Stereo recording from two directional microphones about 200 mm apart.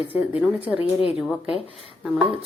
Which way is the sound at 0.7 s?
30° left (ahead or behind).